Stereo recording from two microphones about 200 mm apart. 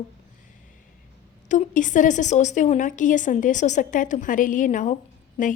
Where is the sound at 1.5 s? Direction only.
40° left (ahead or behind).